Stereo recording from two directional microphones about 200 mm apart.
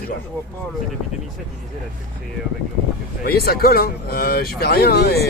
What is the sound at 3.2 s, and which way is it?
Speech, 50° left (ahead or behind).